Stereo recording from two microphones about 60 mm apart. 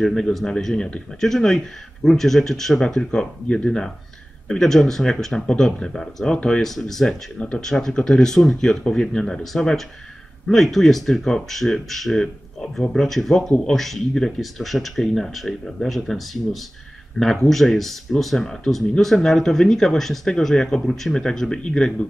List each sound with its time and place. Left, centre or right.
0.0 s speech: centre
7.3 s speech: centre
7.6 s speech: centre
17.2 s speech: centre